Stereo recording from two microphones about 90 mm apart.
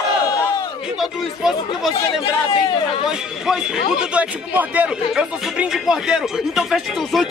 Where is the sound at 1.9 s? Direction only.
90° left.